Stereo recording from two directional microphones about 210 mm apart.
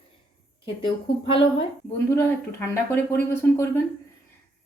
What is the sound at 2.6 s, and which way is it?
Speech, 10° left (ahead or behind).